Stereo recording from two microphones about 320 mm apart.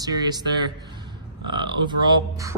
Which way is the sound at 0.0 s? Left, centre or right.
Centre.